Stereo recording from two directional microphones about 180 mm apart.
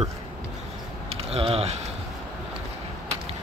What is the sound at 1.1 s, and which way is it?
Speech, 35° right (ahead or behind).